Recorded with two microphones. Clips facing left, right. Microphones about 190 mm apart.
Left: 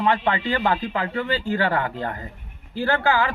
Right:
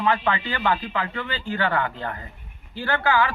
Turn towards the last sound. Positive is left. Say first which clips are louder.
# left 1 dB
turn(degrees=40)  # may be behind; listen again after turning